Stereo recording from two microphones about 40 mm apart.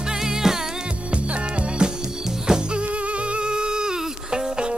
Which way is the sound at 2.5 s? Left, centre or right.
Centre.